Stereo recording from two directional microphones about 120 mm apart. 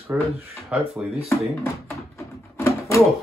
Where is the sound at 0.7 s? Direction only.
Centre (ahead or behind).